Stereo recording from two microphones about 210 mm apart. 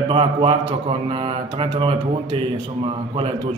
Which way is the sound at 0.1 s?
25° right (ahead or behind).